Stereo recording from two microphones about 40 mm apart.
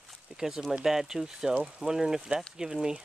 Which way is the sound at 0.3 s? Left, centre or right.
Right.